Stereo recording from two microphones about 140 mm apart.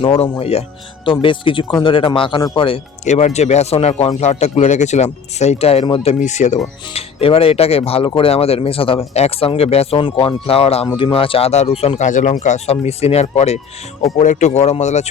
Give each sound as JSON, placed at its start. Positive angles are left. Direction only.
{"t": 0.0, "sound": "speech", "side_deg": 45}
{"t": 3.1, "sound": "speech", "side_deg": 55}
{"t": 6.1, "sound": "speech", "side_deg": 60}
{"t": 6.9, "sound": "speech", "side_deg": 45}